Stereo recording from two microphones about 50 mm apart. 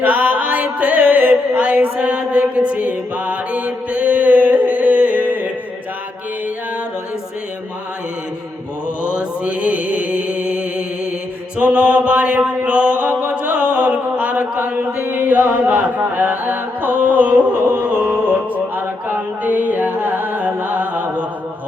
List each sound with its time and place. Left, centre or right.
0.0 s chant: right
1.5 s mantra: right
9.0 s mantra: right
15.0 s music: right